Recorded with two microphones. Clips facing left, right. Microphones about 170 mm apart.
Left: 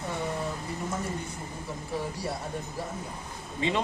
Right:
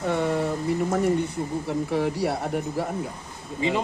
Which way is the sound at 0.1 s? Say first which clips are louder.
Right 9 dB; 75° right (ahead or behind).